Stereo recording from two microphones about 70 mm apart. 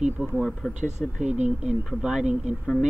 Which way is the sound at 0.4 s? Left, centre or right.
Centre.